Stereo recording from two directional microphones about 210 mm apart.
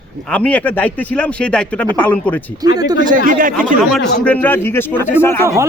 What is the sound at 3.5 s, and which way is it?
Speech, centre (ahead or behind).